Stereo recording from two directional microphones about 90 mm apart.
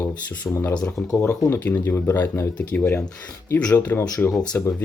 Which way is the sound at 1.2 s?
25° left (ahead or behind).